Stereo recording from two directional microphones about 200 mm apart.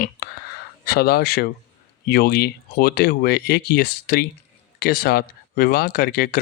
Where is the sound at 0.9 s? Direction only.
55° left (ahead or behind).